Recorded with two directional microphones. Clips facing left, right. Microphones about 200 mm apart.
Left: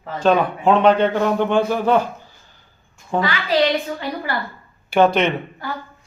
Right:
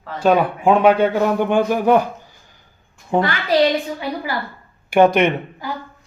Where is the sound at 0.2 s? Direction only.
10° right (ahead or behind).